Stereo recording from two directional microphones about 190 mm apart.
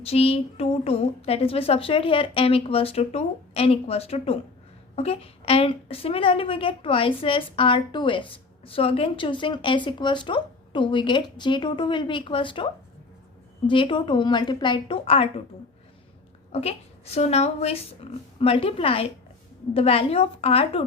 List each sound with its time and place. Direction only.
0.0 s a woman's voice: 30° left (ahead or behind)
13.7 s a woman's voice: 25° left (ahead or behind)
16.5 s a woman's voice: 35° left (ahead or behind)